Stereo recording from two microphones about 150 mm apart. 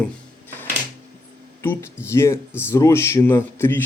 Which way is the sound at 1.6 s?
15° left (ahead or behind).